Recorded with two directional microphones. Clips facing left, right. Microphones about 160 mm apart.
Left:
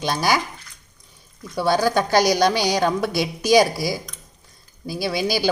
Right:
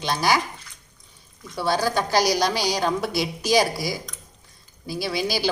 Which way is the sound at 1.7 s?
50° left (ahead or behind).